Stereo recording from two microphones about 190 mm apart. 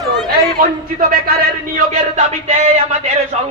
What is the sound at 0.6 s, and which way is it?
Speech, 50° right (ahead or behind).